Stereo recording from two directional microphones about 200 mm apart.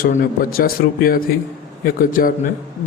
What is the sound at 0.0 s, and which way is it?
Speech, 45° left (ahead or behind).